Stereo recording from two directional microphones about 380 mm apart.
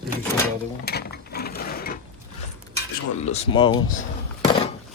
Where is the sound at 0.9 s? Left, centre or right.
Left.